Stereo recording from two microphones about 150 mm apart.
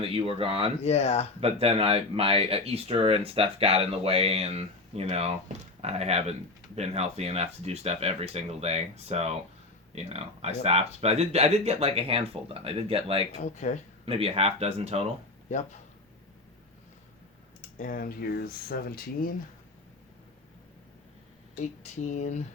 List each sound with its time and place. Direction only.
0.0 s speech: 40° right (ahead or behind)
0.9 s speech: 45° left (ahead or behind)
1.4 s speech: 40° right (ahead or behind)
13.4 s speech: 55° left (ahead or behind)
14.0 s speech: 40° right (ahead or behind)
17.7 s speech: 70° left (ahead or behind)
21.6 s speech: 50° left (ahead or behind)